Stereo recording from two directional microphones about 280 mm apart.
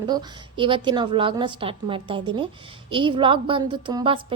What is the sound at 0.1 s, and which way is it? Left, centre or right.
A woman's voice, centre.